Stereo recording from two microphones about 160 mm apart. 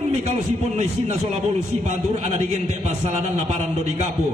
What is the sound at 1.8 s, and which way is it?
Speech, 45° right (ahead or behind).